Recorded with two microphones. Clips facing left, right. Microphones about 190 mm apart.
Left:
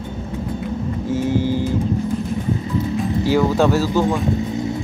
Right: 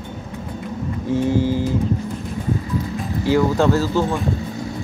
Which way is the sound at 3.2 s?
15° left (ahead or behind).